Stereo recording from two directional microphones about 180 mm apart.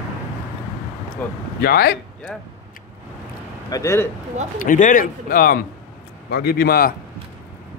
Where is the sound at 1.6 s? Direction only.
60° left (ahead or behind).